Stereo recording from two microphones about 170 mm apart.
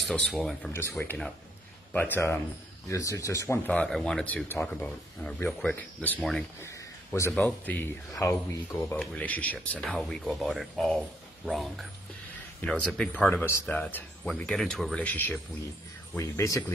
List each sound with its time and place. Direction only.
0.3 s speech: centre (ahead or behind)
0.7 s speech: 15° left (ahead or behind)
6.6 s a sound: 15° left (ahead or behind)
7.4 s speech: 10° left (ahead or behind)